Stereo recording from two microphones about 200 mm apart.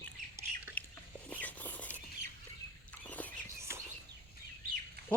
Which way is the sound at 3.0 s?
10° left (ahead or behind).